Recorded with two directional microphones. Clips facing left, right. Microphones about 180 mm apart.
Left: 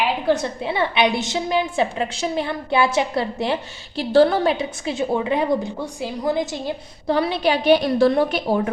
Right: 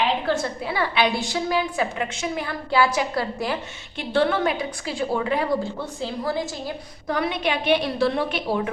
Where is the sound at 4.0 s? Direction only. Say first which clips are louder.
Left 6 dB; 35° left (ahead or behind).